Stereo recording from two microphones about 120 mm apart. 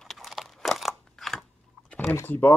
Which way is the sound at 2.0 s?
20° left (ahead or behind).